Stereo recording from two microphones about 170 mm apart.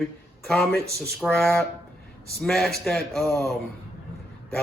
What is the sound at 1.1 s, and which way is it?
Speech, centre (ahead or behind).